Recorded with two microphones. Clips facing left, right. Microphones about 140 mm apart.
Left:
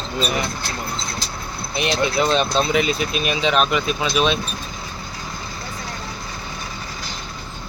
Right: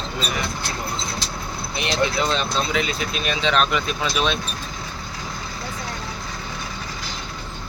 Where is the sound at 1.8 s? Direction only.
20° left (ahead or behind).